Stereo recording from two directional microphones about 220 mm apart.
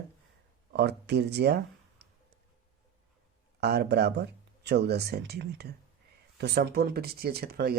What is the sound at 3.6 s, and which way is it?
Speech, 50° right (ahead or behind).